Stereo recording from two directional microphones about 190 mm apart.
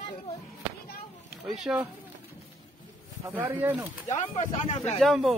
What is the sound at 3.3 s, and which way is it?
Speech, 10° right (ahead or behind).